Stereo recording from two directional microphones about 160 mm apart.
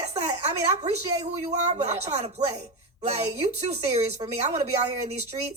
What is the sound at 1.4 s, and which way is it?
A woman's voice, 45° right (ahead or behind).